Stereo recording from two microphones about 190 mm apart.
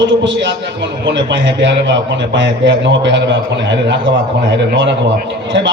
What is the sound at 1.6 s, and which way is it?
A man's voice, 70° right (ahead or behind).